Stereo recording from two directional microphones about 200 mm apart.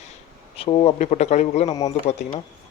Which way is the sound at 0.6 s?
30° left (ahead or behind).